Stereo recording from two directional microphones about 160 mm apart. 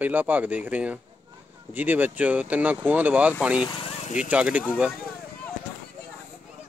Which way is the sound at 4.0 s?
50° left (ahead or behind).